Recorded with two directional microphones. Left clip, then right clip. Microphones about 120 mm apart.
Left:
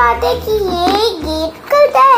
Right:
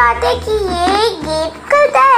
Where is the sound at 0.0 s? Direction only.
55° left (ahead or behind).